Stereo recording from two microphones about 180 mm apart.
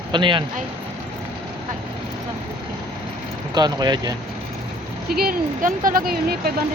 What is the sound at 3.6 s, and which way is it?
Speech, 20° right (ahead or behind).